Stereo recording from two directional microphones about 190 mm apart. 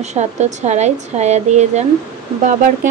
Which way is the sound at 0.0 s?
35° right (ahead or behind).